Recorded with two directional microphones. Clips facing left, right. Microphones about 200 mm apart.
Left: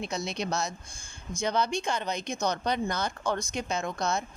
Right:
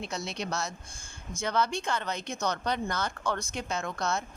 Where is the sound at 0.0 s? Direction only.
15° left (ahead or behind).